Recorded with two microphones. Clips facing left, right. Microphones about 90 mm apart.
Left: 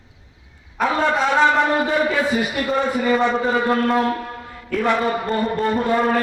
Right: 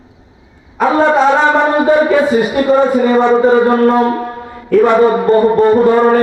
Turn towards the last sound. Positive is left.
turn(degrees=-35)  # may be behind; listen again after turning